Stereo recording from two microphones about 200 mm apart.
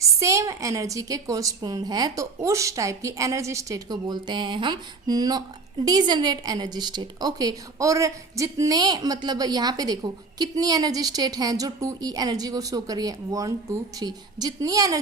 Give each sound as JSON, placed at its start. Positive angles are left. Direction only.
{"t": 0.0, "sound": "a woman's voice", "side_deg": -15}